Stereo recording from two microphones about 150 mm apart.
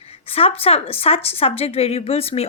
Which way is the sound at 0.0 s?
40° left (ahead or behind).